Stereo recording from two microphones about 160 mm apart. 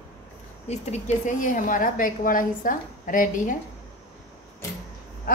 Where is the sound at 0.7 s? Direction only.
45° left (ahead or behind).